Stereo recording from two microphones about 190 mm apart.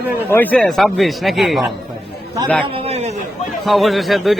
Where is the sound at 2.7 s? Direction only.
30° right (ahead or behind).